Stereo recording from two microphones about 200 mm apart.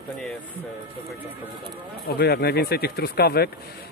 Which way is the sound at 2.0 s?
55° left (ahead or behind).